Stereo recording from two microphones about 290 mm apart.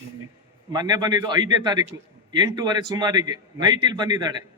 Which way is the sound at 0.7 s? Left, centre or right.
Centre.